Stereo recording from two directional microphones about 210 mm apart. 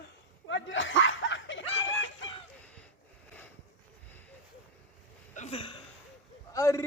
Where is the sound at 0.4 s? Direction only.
60° left (ahead or behind).